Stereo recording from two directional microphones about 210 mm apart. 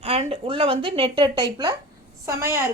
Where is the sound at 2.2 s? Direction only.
10° right (ahead or behind).